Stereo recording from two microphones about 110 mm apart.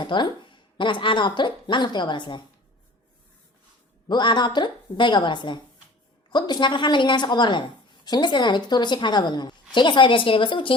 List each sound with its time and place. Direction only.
0.0 s speech: 45° left (ahead or behind)
4.1 s a woman's voice: 45° left (ahead or behind)